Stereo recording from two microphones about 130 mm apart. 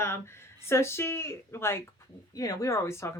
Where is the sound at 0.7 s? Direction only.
20° left (ahead or behind).